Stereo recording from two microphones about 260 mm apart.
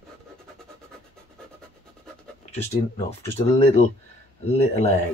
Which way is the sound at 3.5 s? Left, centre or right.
Left.